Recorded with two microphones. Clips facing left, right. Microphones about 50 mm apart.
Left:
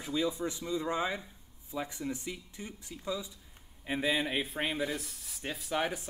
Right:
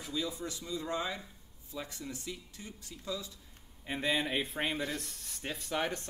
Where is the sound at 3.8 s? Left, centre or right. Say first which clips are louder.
Left 2 dB; centre.